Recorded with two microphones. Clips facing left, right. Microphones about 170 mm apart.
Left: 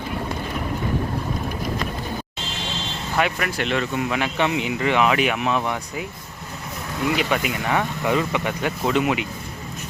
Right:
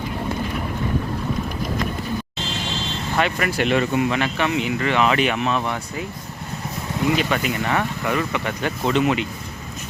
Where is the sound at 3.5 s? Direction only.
10° right (ahead or behind).